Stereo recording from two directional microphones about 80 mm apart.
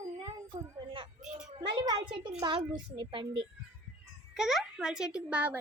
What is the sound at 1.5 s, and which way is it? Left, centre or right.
A child's voice, right.